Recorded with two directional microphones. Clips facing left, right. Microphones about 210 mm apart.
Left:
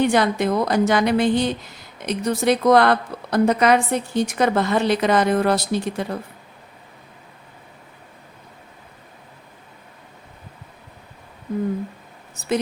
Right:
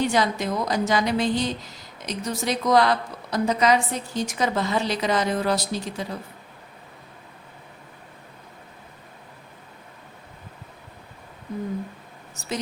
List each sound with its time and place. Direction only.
0.0 s a woman's voice: 60° left (ahead or behind)